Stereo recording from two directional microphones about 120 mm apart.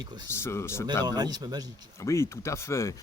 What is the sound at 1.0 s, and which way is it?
Speech, 35° right (ahead or behind).